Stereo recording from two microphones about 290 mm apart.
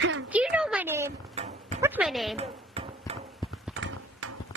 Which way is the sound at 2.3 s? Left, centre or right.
Right.